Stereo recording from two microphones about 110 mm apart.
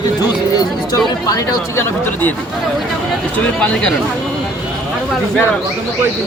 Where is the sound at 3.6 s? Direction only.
10° left (ahead or behind).